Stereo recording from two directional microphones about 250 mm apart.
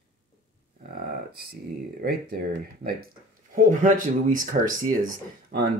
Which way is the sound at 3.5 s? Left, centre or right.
Right.